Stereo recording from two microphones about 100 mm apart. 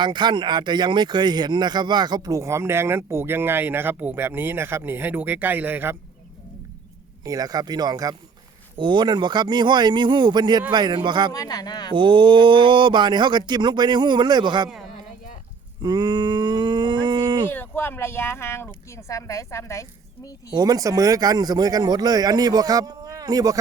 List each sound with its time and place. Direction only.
0.0 s speech: 50° right (ahead or behind); by 6.0 s 20° right (ahead or behind)
7.3 s speech: 40° right (ahead or behind)
8.8 s speech: 50° right (ahead or behind)
11.3 s speech: 40° left (ahead or behind)
11.9 s speech: 55° right (ahead or behind)
15.8 s a sound: 40° right (ahead or behind)
17.5 s speech: 20° left (ahead or behind)
20.5 s speech: 40° right (ahead or behind)